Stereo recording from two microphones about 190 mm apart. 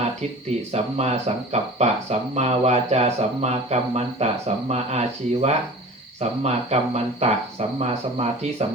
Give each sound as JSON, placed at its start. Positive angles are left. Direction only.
{"t": 0.7, "sound": "speech", "side_deg": -35}